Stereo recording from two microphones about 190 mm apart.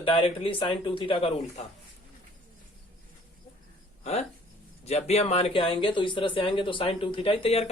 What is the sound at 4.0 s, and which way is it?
Speech, 35° left (ahead or behind).